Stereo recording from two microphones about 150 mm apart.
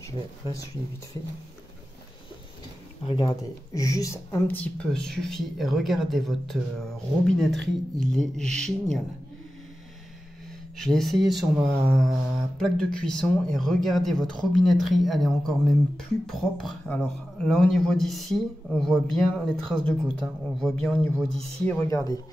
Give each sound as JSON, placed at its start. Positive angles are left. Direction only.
{"t": 3.1, "sound": "speech", "side_deg": 25}
{"t": 10.8, "sound": "speech", "side_deg": 0}
{"t": 21.8, "sound": "speech", "side_deg": 20}